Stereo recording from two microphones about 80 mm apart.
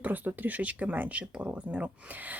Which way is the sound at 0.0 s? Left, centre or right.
Right.